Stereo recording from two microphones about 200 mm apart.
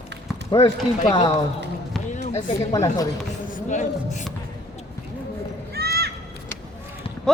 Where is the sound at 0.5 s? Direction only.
20° left (ahead or behind).